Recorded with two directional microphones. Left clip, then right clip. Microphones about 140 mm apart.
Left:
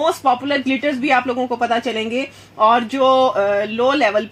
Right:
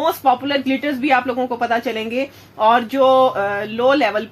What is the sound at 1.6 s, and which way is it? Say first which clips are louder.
Speech: left 1 dB; 40° left (ahead or behind).